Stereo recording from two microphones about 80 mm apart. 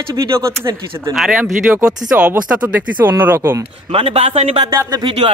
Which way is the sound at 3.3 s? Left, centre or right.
Right.